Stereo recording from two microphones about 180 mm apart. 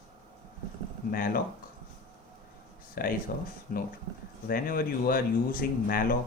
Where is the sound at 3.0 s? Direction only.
55° left (ahead or behind).